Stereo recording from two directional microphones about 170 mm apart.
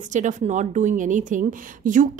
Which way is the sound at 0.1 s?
45° right (ahead or behind).